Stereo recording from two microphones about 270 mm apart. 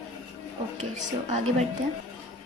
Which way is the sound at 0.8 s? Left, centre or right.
Right.